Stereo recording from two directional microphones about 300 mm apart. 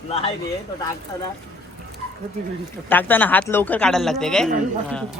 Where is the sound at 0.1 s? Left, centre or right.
Centre.